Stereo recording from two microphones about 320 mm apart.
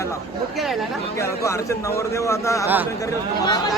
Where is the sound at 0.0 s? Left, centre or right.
Centre.